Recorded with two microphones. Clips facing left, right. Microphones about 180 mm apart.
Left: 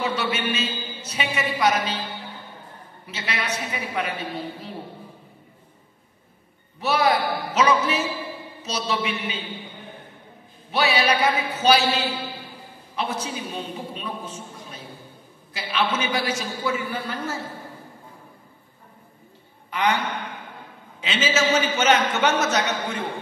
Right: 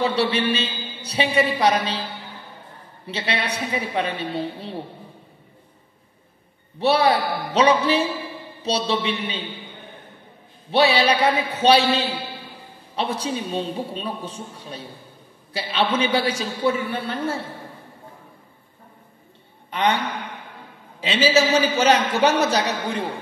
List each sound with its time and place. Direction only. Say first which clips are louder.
0.0 s a man's voice: right 5 dB; 35° right (ahead or behind)
3.1 s a man's voice: right 3 dB; 30° right (ahead or behind)
6.8 s a man's voice: right 3 dB; 35° right (ahead or behind)
10.7 s a man's voice: right 4 dB; 30° right (ahead or behind)
21.0 s a man's voice: right 5 dB; 35° right (ahead or behind)